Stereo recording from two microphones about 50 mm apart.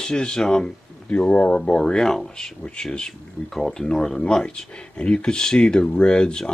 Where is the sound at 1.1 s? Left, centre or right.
Left.